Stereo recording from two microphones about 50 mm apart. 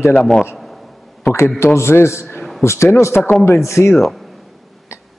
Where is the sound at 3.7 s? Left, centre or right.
Left.